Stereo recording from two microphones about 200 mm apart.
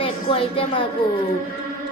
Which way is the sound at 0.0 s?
25° left (ahead or behind).